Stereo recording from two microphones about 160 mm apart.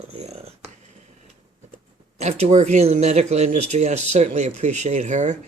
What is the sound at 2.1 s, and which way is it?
Speech, 40° right (ahead or behind).